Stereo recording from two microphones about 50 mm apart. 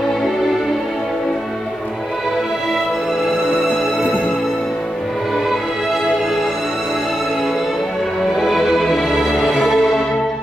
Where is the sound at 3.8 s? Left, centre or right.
Left.